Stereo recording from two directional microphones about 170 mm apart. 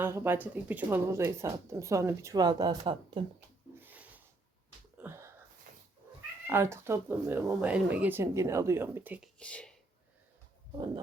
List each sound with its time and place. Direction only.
0.0 s speech: 15° right (ahead or behind)
3.8 s a sound: 10° right (ahead or behind)
5.7 s cat: 55° right (ahead or behind)
6.5 s speech: 15° right (ahead or behind)
9.4 s speech: 5° left (ahead or behind)